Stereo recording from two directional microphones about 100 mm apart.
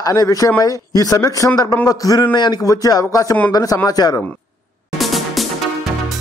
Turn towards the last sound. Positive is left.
turn(degrees=0)  # may be behind; listen again after turning